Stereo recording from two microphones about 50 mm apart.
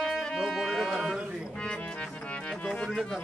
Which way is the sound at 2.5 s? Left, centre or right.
Centre.